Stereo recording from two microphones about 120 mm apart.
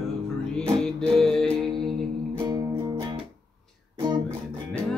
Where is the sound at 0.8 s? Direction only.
5° left (ahead or behind).